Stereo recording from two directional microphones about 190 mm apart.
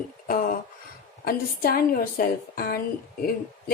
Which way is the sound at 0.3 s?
50° left (ahead or behind).